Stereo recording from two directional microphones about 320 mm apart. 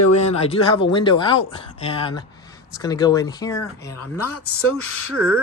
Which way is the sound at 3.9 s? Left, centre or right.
Left.